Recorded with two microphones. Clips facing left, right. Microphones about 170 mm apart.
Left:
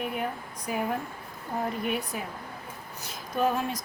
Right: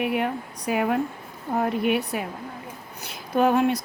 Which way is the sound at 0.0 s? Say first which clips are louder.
Right 7 dB; 80° right.